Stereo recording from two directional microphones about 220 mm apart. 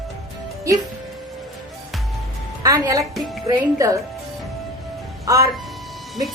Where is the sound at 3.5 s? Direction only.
15° right (ahead or behind).